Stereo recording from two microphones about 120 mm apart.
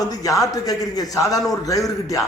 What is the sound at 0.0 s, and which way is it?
A man's voice, 30° left (ahead or behind).